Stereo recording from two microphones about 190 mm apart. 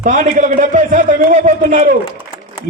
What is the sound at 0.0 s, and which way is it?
A man's voice, 45° right (ahead or behind).